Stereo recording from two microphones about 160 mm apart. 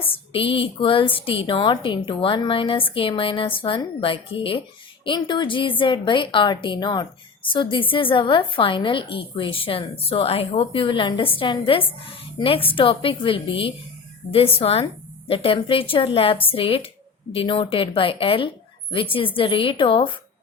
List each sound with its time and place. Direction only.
0.1 s a woman's voice: 35° left (ahead or behind)